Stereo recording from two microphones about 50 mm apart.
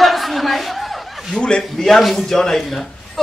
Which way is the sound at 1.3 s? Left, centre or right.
Centre.